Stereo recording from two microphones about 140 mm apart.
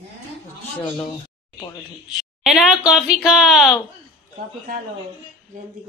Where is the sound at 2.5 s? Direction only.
5° right (ahead or behind).